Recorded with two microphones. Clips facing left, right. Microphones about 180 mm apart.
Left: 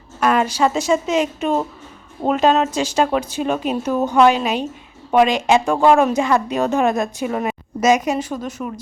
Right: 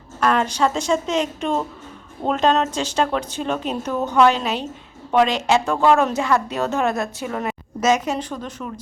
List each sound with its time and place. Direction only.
0.2 s speech: 10° left (ahead or behind)